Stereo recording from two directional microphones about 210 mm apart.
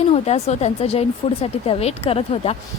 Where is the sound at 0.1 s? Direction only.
30° left (ahead or behind).